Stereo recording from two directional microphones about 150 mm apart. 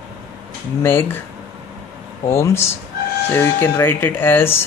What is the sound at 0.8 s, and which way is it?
Speech, 15° left (ahead or behind).